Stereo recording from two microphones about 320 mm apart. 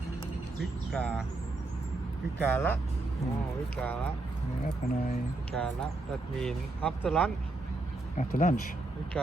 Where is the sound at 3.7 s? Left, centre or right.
Centre.